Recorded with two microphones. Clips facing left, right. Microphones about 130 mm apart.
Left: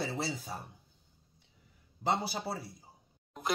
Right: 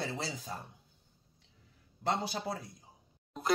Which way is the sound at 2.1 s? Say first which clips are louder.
Left 1 dB; 10° left (ahead or behind).